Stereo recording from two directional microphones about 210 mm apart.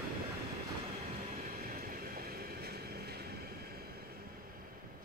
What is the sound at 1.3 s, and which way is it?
Vehicle, 40° right (ahead or behind).